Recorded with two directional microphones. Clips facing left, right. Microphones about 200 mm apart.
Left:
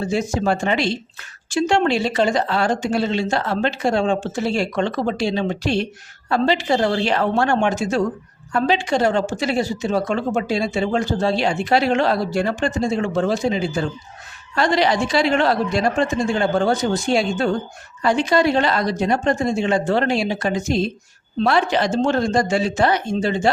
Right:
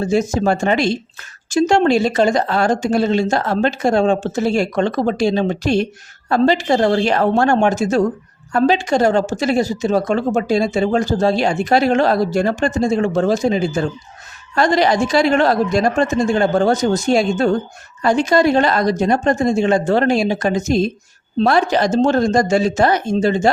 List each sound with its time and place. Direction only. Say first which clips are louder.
0.0 s speech: right 4 dB; 45° right (ahead or behind)